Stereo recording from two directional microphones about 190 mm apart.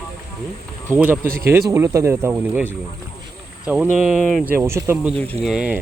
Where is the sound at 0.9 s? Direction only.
10° right (ahead or behind).